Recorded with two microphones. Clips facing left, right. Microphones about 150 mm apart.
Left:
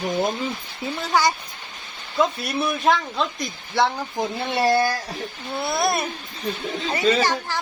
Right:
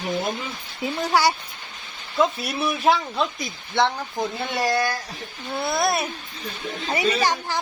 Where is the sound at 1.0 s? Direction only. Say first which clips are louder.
Even; 10° right (ahead or behind).